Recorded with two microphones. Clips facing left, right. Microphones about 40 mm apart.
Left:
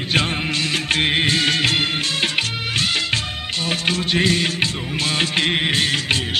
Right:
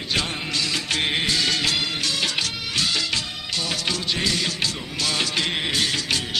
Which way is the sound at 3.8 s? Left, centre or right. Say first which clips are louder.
Left 8 dB; left.